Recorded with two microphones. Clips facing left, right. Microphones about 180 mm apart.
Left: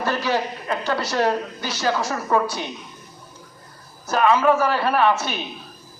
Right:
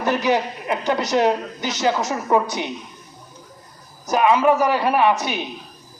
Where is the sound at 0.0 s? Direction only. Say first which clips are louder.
Right 3 dB; 20° right (ahead or behind).